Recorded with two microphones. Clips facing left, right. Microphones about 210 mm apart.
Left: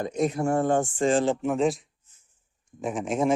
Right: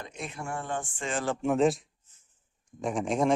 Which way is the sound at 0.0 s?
40° left (ahead or behind).